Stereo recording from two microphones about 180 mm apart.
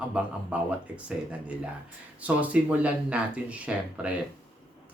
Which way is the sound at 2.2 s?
5° right (ahead or behind).